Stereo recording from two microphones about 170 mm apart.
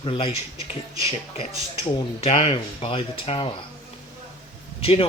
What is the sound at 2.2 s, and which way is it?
Speech, 35° left (ahead or behind).